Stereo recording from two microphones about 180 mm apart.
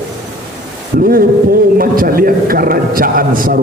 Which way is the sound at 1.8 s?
55° right (ahead or behind).